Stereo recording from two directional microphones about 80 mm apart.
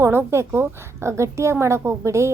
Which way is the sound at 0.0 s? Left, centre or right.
Right.